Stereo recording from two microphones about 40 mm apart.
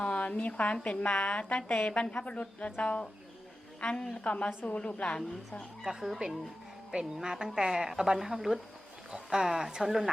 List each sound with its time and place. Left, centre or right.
0.0 s a woman's voice: left
0.8 s a woman's voice: centre
1.3 s speech: left
1.9 s a woman's voice: left
3.8 s a woman's voice: centre
4.2 s speech: left
5.8 s a woman's voice: centre
9.7 s a woman's voice: centre